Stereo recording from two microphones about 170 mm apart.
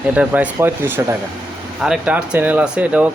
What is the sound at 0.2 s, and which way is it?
Speech, 10° right (ahead or behind).